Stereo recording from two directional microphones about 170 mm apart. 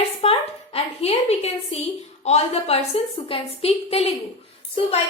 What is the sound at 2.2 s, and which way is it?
A woman's voice, 40° left (ahead or behind).